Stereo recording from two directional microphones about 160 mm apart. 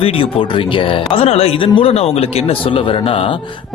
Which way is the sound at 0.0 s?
35° left (ahead or behind).